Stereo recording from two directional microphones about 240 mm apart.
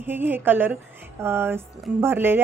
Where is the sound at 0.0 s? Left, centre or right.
Centre.